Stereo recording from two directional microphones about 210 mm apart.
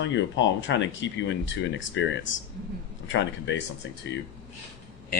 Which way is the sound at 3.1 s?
60° left (ahead or behind).